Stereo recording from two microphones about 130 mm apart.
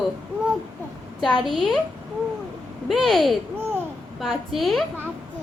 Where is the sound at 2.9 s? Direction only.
Centre (ahead or behind).